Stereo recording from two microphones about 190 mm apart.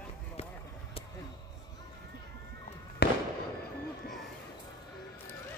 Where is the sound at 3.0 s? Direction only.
60° left (ahead or behind).